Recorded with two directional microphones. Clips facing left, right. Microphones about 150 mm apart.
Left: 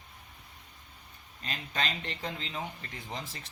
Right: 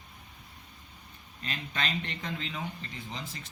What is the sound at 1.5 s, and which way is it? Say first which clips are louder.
Speech: even; 35° left (ahead or behind).